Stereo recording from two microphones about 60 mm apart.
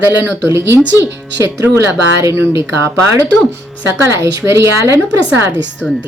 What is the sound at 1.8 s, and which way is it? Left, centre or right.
Speech, right.